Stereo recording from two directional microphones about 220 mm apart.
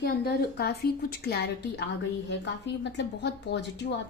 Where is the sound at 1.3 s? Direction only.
50° left (ahead or behind).